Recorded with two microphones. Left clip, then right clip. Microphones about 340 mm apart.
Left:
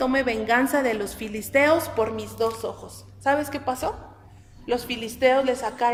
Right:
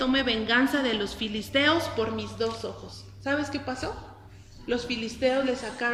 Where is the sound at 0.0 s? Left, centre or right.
Centre.